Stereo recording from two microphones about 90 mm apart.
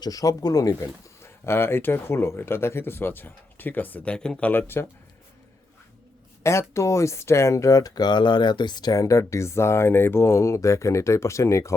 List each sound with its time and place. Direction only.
0.0 s speech: 40° left (ahead or behind); by 4.6 s 15° left (ahead or behind)
4.6 s speech: 25° left (ahead or behind)
6.4 s speech: 30° left (ahead or behind)